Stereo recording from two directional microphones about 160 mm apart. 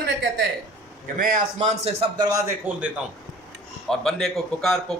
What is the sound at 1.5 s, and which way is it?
Speech, 40° right (ahead or behind).